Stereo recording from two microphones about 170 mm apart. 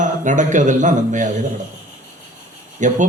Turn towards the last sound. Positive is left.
turn(degrees=-45)  # may be behind; listen again after turning